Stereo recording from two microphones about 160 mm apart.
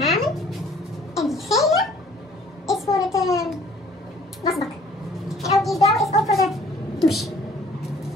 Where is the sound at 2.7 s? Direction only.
20° left (ahead or behind).